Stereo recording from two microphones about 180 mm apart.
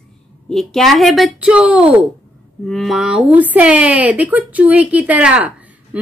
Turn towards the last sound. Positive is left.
turn(degrees=-5)  # may be behind; listen again after turning